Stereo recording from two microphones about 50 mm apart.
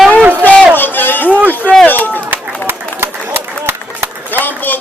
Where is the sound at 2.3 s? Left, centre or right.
Right.